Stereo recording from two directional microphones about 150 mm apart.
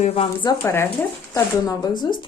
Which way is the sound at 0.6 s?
15° left (ahead or behind).